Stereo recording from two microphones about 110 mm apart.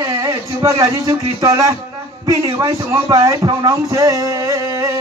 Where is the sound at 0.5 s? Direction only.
30° right (ahead or behind).